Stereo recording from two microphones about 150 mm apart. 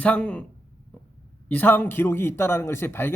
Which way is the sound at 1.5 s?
10° left (ahead or behind).